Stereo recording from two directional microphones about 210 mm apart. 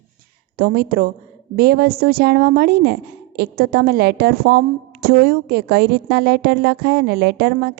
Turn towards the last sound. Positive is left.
turn(degrees=-50)  # may be behind; listen again after turning